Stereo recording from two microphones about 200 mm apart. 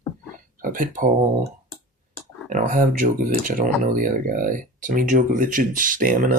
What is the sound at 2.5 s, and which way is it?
Speech, 40° right (ahead or behind).